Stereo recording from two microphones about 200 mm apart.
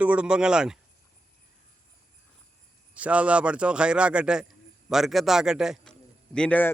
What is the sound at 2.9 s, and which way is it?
Speech, 5° right (ahead or behind).